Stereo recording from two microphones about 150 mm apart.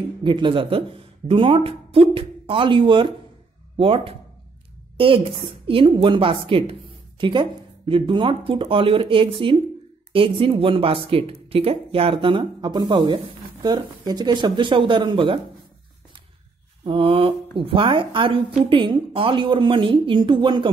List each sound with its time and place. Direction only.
0.2 s speech: 30° right (ahead or behind)
16.8 s speech: 35° right (ahead or behind)